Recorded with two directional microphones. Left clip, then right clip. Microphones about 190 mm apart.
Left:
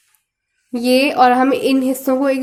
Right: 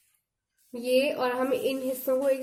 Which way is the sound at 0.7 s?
25° left (ahead or behind).